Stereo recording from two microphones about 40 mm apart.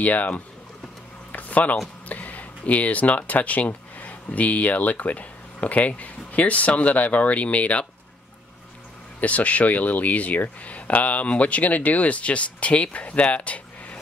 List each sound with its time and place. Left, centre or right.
0.0 s speech: left
1.3 s a sound: left
2.0 s speech: left
9.2 s speech: left